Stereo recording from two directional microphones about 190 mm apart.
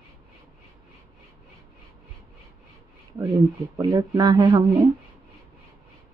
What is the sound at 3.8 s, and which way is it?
Speech, 15° right (ahead or behind).